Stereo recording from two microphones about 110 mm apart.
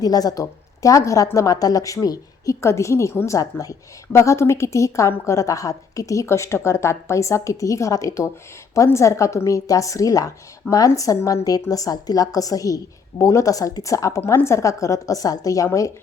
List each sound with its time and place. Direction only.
0.0 s a woman's voice: 35° left (ahead or behind)